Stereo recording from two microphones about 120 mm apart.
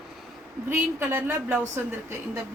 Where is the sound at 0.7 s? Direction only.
20° right (ahead or behind).